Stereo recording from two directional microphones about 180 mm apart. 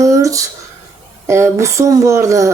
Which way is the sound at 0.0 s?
20° right (ahead or behind).